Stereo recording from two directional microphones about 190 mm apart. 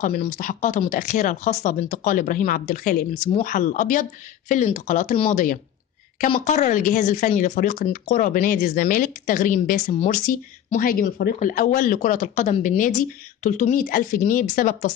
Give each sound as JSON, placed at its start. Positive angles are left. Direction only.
{"t": 0.4, "sound": "speech", "side_deg": 45}
{"t": 5.3, "sound": "speech", "side_deg": 45}